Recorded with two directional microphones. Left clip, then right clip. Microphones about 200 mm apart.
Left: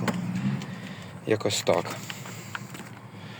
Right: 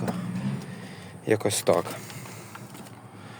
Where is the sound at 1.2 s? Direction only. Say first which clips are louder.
Right 1 dB; 15° right (ahead or behind).